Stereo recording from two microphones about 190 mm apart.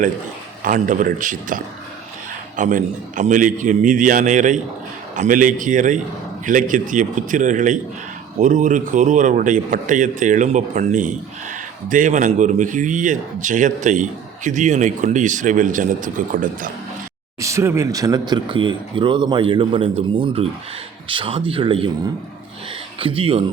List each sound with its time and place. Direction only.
0.6 s a man's voice: 45° right (ahead or behind)
17.4 s speech: 15° right (ahead or behind)
23.0 s speech: 30° right (ahead or behind)